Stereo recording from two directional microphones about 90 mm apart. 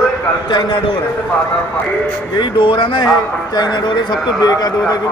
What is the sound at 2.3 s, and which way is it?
A man's voice, 60° left (ahead or behind).